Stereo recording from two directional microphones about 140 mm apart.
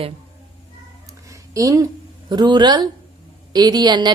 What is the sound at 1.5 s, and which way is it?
A woman's voice, 25° right (ahead or behind).